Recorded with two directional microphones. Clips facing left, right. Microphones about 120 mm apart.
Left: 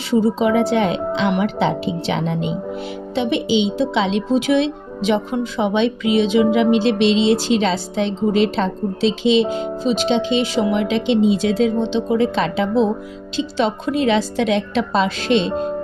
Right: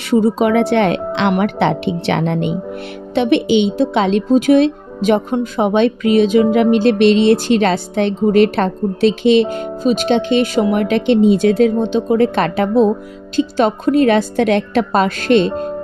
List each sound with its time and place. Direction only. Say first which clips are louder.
0.1 s speech: right 3 dB; 60° right (ahead or behind)